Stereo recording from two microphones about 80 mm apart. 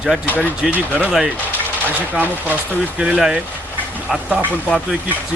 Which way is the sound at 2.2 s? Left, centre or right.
Right.